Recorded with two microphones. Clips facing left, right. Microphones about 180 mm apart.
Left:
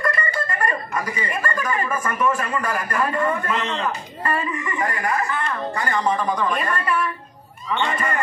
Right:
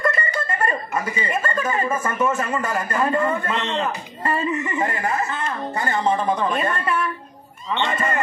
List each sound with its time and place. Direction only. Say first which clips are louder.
0.0 s speech: right 1 dB; 25° right (ahead or behind)